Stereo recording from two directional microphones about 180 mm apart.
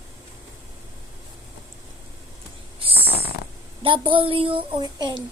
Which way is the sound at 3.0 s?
60° left (ahead or behind).